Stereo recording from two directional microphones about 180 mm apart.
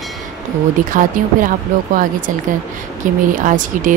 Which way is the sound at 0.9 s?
50° right (ahead or behind).